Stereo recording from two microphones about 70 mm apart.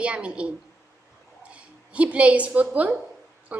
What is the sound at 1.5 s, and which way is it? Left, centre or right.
A woman's voice, centre.